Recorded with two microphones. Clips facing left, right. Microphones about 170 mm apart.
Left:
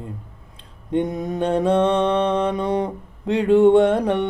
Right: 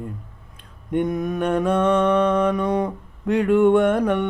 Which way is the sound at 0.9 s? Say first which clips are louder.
Even; 30° left (ahead or behind).